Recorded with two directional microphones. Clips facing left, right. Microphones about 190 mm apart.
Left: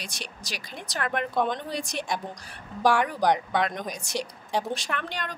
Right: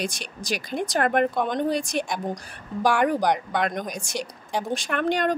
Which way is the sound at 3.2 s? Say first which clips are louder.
Even; centre (ahead or behind).